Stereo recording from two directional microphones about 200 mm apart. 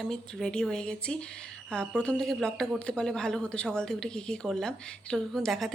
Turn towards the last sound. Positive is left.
turn(degrees=0)  # may be behind; listen again after turning